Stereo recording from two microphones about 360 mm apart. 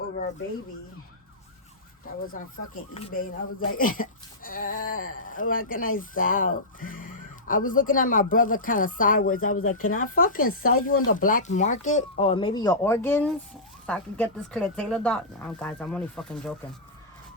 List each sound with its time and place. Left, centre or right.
2.2 s speech: left
3.4 s speech: left
3.8 s speech: left
10.9 s speech: left
11.2 s speech: left; by 16.6 s centre